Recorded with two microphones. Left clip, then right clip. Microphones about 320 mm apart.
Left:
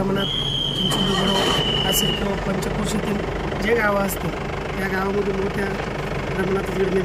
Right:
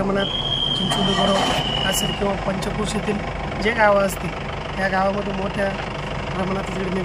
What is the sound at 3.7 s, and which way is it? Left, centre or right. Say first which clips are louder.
Speech: right 4 dB; centre.